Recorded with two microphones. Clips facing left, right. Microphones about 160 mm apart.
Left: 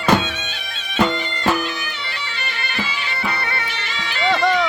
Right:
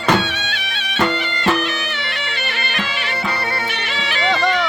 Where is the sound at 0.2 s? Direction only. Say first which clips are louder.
Right 3 dB; 70° right (ahead or behind).